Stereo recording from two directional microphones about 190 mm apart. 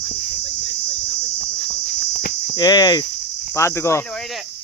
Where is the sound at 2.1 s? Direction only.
50° left (ahead or behind).